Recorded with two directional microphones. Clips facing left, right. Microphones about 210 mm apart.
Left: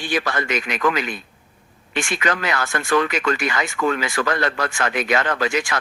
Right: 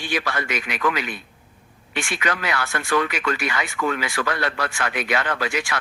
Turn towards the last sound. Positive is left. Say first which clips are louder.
# left 3 dB
turn(degrees=45)  # may be behind; listen again after turning